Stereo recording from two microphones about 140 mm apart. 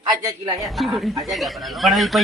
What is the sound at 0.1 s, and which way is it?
Speech, 25° right (ahead or behind).